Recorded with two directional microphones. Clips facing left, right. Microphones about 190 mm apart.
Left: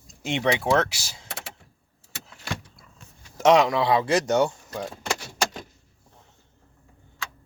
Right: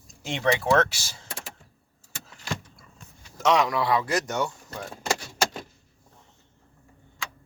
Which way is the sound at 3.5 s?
25° left (ahead or behind).